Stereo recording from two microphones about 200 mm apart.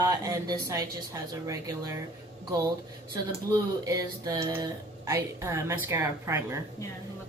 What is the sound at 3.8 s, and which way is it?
A woman's voice, 15° right (ahead or behind).